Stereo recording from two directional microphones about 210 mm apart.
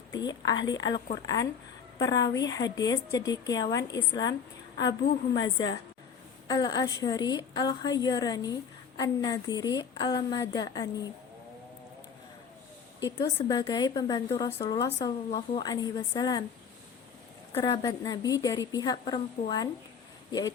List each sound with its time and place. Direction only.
0.1 s a woman's voice: 20° left (ahead or behind)
13.1 s a woman's voice: 20° left (ahead or behind)
17.6 s a woman's voice: 20° left (ahead or behind)